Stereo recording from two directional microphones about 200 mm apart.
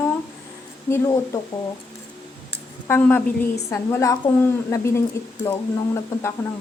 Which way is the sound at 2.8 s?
10° left (ahead or behind).